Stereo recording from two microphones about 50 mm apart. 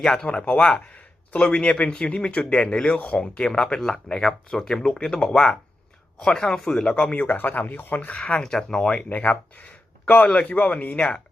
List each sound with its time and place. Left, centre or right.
0.0 s speech: centre
0.4 s speech: left
8.4 s speech: centre
9.0 s speech: left